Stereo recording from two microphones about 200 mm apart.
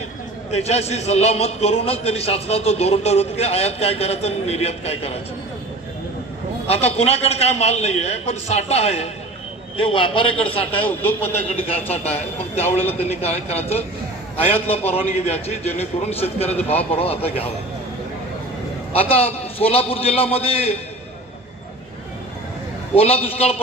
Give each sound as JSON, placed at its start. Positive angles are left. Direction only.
{"t": 0.5, "sound": "a man's voice", "side_deg": 30}
{"t": 6.7, "sound": "a man's voice", "side_deg": 30}
{"t": 11.9, "sound": "a man's voice", "side_deg": 30}
{"t": 18.9, "sound": "a man's voice", "side_deg": 30}
{"t": 23.0, "sound": "a man's voice", "side_deg": 30}